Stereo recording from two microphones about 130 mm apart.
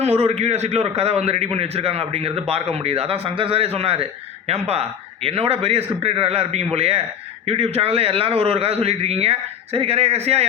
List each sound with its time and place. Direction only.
0.2 s a man's voice: 55° right (ahead or behind)